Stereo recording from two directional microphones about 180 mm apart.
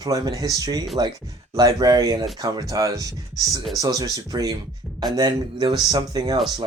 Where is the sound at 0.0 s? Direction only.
20° right (ahead or behind).